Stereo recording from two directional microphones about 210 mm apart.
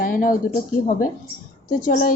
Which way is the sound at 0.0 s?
40° left (ahead or behind).